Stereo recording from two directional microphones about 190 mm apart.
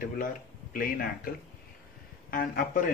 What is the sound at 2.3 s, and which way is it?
Speech, 45° left (ahead or behind).